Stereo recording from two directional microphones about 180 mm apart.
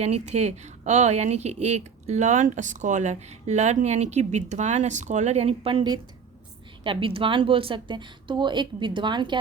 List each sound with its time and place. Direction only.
0.0 s a woman's voice: 35° right (ahead or behind)